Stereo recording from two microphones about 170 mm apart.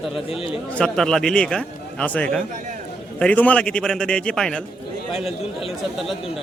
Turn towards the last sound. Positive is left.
turn(degrees=35)  # may be behind; listen again after turning